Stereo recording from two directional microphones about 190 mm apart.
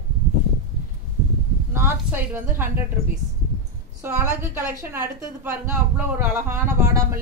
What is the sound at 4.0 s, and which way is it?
Speech, 10° right (ahead or behind).